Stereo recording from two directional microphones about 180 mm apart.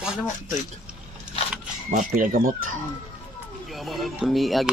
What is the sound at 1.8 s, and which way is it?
Speech, 50° right (ahead or behind).